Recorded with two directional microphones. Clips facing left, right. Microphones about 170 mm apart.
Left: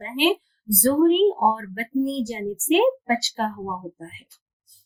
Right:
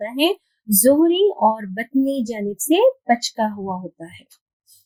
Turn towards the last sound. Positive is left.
turn(degrees=-40)  # may be behind; listen again after turning